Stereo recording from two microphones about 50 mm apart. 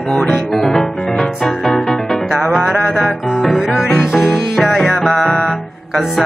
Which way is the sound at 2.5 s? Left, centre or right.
Centre.